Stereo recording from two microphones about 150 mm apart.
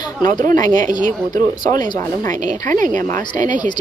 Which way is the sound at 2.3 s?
60° right (ahead or behind).